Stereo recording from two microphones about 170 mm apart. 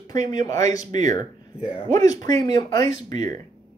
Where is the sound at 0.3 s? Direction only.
20° left (ahead or behind).